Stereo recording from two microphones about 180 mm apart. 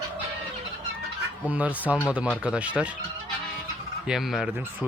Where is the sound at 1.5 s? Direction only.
10° right (ahead or behind).